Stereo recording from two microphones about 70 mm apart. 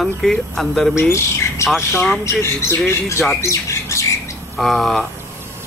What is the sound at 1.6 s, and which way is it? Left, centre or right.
Speech, left.